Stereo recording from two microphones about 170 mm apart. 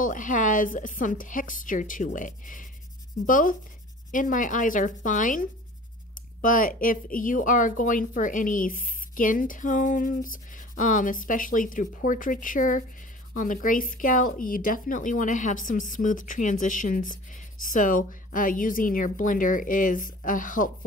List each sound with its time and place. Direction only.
0.0 s speech: 50° left (ahead or behind)